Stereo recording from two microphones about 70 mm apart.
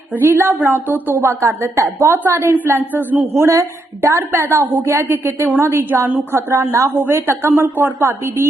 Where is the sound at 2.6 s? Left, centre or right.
Right.